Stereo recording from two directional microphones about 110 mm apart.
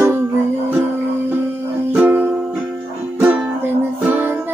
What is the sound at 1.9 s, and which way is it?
Music, 15° right (ahead or behind).